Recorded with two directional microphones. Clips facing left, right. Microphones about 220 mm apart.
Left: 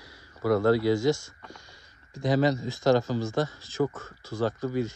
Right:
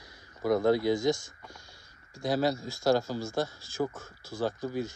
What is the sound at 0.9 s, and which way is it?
Speech, 10° left (ahead or behind).